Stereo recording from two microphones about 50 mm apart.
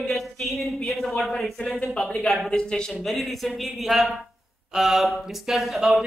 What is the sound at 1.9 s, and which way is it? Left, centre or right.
A man's voice, centre.